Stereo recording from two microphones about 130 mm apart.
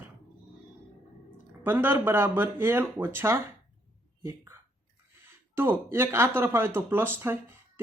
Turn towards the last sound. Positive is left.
turn(degrees=-15)  # may be behind; listen again after turning